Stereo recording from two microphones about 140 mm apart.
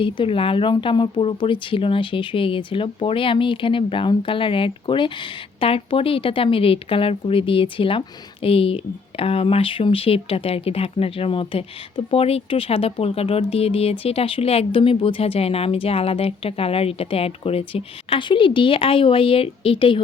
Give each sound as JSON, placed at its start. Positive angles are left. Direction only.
{"t": 0.0, "sound": "speech", "side_deg": 40}